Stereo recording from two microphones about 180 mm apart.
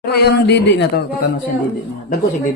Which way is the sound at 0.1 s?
65° left (ahead or behind).